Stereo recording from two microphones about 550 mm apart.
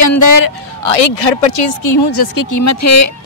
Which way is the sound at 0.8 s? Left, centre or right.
Left.